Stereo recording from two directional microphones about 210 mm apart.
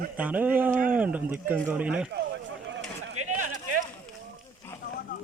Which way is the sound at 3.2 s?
90° right.